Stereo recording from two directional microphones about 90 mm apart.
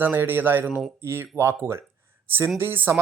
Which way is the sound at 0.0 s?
25° right (ahead or behind).